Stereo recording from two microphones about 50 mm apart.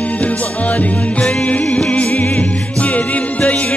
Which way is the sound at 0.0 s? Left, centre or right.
Left.